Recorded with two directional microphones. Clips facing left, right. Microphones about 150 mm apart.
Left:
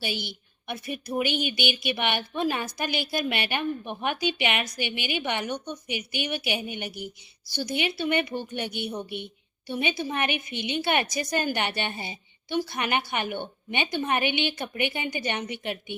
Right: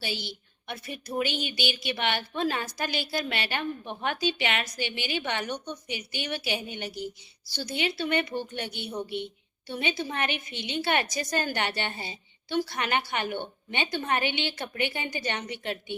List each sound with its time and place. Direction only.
0.0 s a woman's voice: 15° left (ahead or behind)